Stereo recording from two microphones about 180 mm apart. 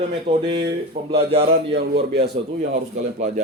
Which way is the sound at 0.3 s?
30° right (ahead or behind).